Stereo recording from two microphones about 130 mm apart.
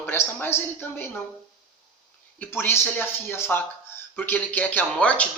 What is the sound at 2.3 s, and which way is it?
Speech, 15° left (ahead or behind).